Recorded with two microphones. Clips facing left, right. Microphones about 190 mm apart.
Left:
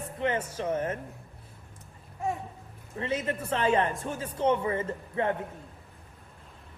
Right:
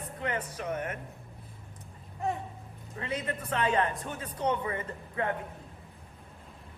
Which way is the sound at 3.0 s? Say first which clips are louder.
Left 4 dB; 30° left (ahead or behind).